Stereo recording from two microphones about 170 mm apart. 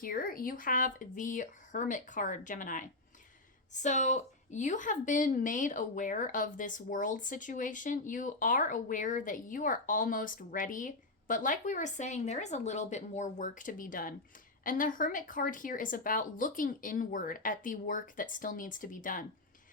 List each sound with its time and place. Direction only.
0.0 s a woman's voice: 55° left (ahead or behind)